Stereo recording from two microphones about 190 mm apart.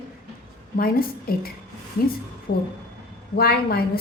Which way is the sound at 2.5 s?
50° left (ahead or behind).